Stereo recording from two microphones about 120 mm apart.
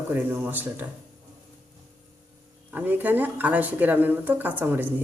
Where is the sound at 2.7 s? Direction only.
15° right (ahead or behind).